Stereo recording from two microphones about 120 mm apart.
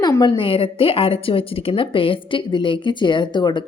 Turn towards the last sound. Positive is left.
turn(degrees=40)  # may be behind; listen again after turning